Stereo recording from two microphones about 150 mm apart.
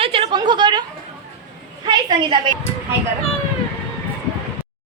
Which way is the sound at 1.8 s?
30° right (ahead or behind).